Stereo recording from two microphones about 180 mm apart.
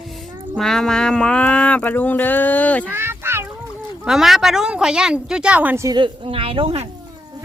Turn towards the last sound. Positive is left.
turn(degrees=-30)  # may be behind; listen again after turning